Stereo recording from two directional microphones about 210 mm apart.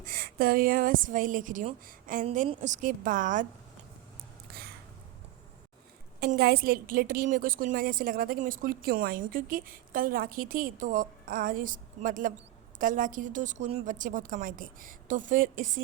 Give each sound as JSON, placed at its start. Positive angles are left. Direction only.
{"t": 0.0, "sound": "speech", "side_deg": -45}
{"t": 6.1, "sound": "a woman's voice", "side_deg": -45}